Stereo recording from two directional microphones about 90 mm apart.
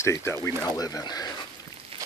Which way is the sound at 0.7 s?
45° left (ahead or behind).